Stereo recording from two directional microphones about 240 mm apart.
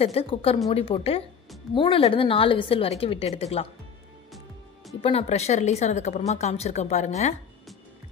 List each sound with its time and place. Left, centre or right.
0.0 s speech: left
5.0 s speech: left